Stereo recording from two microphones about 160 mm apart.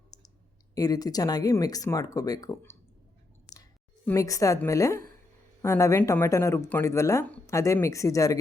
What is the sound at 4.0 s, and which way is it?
Speech, 20° left (ahead or behind).